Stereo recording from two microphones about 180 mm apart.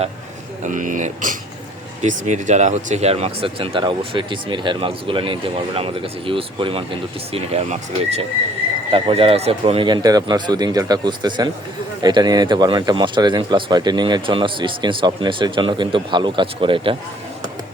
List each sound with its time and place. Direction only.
0.6 s speech: 45° right (ahead or behind); by 17.0 s 30° right (ahead or behind)